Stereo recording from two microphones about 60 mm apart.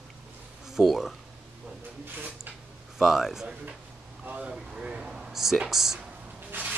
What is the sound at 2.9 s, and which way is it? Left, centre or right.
Speech, centre.